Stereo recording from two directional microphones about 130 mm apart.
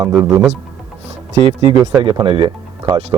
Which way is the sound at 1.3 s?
50° right (ahead or behind).